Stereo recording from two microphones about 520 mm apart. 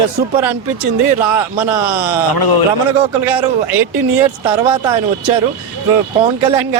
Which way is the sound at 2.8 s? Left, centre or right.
Right.